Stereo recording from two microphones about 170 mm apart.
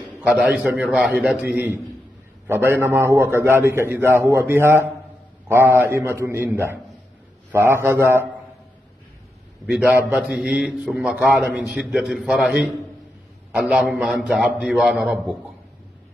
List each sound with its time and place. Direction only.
0.2 s a man's voice: 5° right (ahead or behind)
2.4 s a man's voice: 15° right (ahead or behind)
9.7 s a man's voice: 5° right (ahead or behind)
13.7 s a man's voice: 5° right (ahead or behind)